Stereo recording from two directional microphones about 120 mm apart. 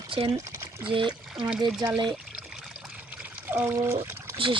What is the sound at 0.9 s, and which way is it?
Speech, 45° right (ahead or behind).